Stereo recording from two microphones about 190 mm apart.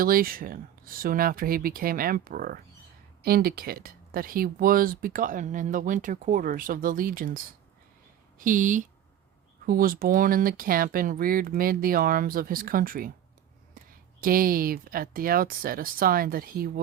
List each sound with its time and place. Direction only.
0.0 s speech: 50° right (ahead or behind)
8.4 s speech: 45° right (ahead or behind)
14.2 s speech: 50° right (ahead or behind)